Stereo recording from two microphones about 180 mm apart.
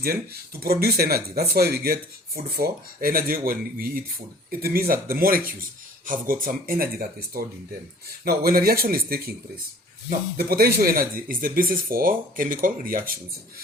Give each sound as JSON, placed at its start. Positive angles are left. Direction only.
{"t": 0.6, "sound": "speech", "side_deg": -60}